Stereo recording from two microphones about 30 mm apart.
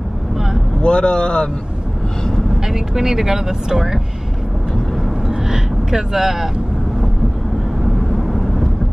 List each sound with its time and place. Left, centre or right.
0.8 s speech: left
2.6 s speech: centre
5.3 s a sound: right
7.8 s vehicle: centre